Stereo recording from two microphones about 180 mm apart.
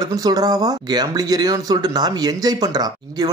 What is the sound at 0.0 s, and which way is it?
Speech, 20° right (ahead or behind).